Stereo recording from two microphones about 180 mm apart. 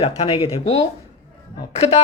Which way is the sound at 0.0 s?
35° left (ahead or behind).